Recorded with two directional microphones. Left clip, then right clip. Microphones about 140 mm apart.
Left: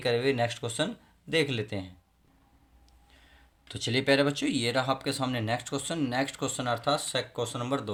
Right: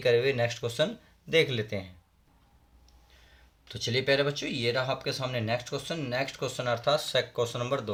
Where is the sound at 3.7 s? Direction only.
35° left (ahead or behind).